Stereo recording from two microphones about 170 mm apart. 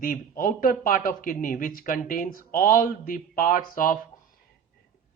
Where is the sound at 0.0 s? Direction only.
55° left (ahead or behind).